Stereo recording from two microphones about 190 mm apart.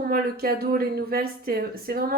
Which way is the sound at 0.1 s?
50° right (ahead or behind).